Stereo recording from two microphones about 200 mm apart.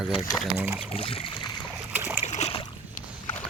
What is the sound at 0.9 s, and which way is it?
Boat, 30° left (ahead or behind).